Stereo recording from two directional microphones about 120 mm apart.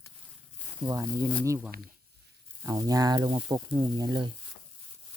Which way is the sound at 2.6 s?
30° right (ahead or behind).